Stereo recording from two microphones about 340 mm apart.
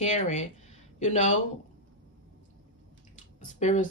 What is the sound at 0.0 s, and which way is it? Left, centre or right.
Speech, left.